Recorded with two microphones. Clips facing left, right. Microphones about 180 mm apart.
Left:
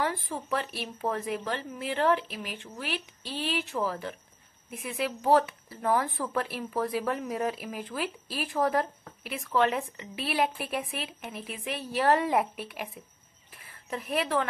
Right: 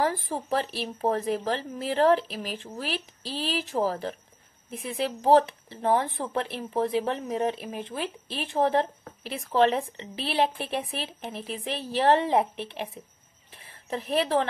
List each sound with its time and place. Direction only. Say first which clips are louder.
0.0 s speech: right 4 dB; 35° right (ahead or behind)